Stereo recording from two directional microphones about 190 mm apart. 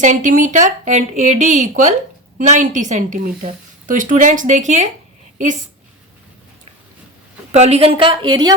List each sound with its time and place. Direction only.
0.0 s speech: 40° right (ahead or behind)
7.5 s speech: 35° right (ahead or behind)